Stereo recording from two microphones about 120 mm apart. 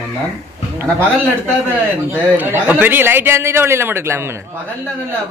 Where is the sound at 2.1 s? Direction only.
15° right (ahead or behind).